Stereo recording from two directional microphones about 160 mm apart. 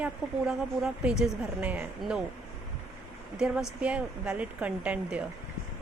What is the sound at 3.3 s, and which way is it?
A woman's voice, 5° right (ahead or behind).